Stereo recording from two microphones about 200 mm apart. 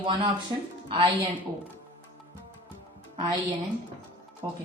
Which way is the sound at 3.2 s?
20° right (ahead or behind).